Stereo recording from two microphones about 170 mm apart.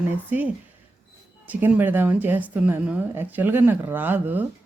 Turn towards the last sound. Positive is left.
turn(degrees=-10)  # may be behind; listen again after turning